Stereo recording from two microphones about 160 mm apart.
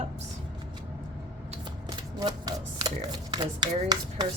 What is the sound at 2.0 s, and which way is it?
Speech, 25° right (ahead or behind).